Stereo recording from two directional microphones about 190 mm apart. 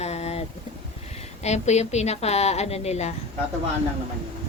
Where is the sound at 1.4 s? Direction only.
35° left (ahead or behind).